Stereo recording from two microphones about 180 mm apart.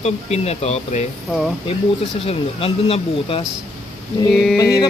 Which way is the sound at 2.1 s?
35° left (ahead or behind).